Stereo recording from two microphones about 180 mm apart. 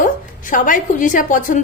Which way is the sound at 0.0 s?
45° left (ahead or behind).